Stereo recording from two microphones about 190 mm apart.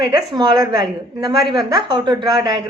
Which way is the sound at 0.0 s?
20° right (ahead or behind).